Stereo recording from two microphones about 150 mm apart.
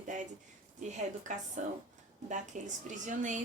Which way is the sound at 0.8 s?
55° right (ahead or behind).